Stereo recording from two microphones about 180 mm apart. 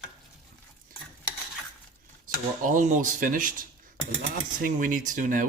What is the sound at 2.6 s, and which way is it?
Speech, 45° right (ahead or behind).